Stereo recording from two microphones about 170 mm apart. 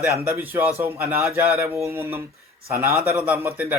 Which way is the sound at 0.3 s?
15° right (ahead or behind).